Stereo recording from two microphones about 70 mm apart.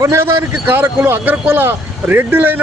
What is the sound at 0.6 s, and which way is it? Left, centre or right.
Speech, right.